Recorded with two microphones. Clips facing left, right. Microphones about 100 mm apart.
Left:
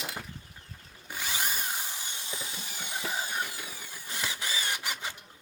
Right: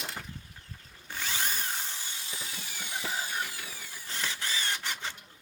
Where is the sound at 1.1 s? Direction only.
15° left (ahead or behind).